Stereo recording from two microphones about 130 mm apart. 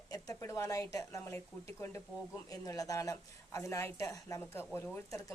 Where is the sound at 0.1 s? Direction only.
25° left (ahead or behind).